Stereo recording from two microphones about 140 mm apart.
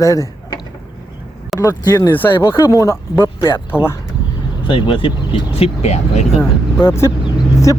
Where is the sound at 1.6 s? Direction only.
25° left (ahead or behind).